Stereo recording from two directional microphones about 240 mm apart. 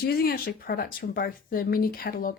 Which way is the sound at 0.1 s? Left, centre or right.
Left.